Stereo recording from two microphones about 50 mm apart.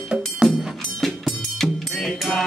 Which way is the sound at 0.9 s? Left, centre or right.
Centre.